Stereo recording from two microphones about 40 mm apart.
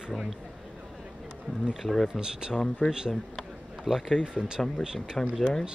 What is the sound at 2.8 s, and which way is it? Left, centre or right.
Speech, left.